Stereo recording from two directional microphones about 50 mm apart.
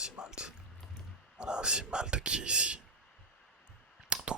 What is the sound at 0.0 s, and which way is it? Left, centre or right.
Music, centre.